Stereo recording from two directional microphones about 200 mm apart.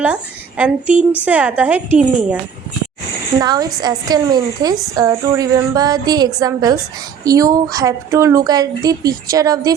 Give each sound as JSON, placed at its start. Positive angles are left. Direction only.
{"t": 0.0, "sound": "a woman's voice", "side_deg": -5}
{"t": 3.4, "sound": "a woman's voice", "side_deg": -20}